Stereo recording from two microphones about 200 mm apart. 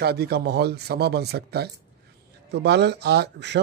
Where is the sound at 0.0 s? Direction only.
50° right (ahead or behind).